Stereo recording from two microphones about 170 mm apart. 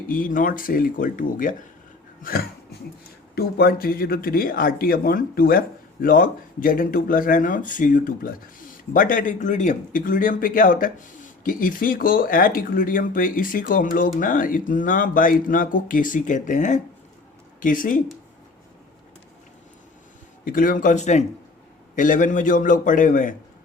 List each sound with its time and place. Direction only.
0.1 s speech: 50° left (ahead or behind)
3.3 s speech: 60° left (ahead or behind)
20.4 s speech: 50° left (ahead or behind)